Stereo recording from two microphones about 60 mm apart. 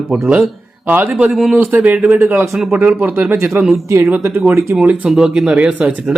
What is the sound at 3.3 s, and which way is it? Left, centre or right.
Speech, right.